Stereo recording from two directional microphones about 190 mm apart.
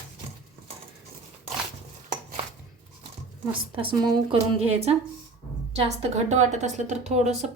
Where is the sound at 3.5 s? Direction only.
25° right (ahead or behind).